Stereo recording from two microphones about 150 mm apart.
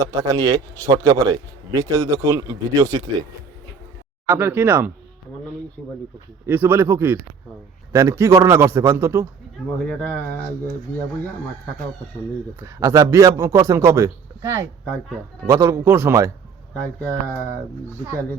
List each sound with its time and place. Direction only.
0.0 s a man's voice: 20° right (ahead or behind)
4.4 s speech: 15° right (ahead or behind)
6.4 s a man's voice: 10° right (ahead or behind)
9.7 s speech: 5° left (ahead or behind)
12.5 s a man's voice: 20° right (ahead or behind)